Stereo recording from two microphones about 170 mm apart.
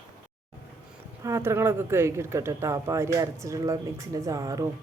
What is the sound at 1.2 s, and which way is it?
Speech, 15° right (ahead or behind).